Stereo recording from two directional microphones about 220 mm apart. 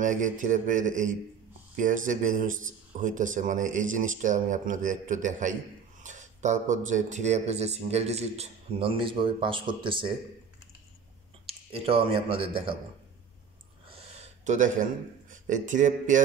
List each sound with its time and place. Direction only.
0.0 s speech: 35° right (ahead or behind)
11.4 s speech: 25° right (ahead or behind)
13.8 s a sound: 25° right (ahead or behind)